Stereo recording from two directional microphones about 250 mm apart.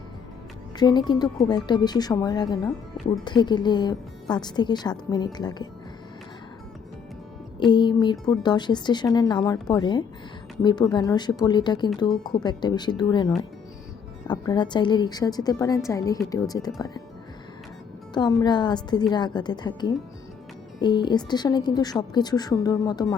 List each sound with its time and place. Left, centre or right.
0.8 s a woman's voice: centre
7.6 s a woman's voice: centre
18.1 s a woman's voice: centre